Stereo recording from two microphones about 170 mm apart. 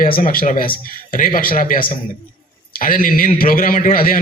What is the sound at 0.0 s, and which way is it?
A man's voice, 55° left (ahead or behind).